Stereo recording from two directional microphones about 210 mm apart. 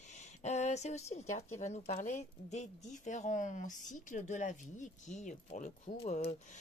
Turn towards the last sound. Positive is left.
turn(degrees=30)  # may be behind; listen again after turning